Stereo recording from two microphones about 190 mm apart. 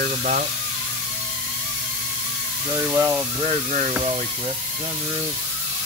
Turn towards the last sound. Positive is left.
turn(degrees=-40)  # may be behind; listen again after turning